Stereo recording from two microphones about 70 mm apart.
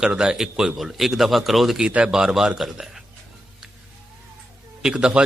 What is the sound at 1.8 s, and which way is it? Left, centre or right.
A man's voice, centre.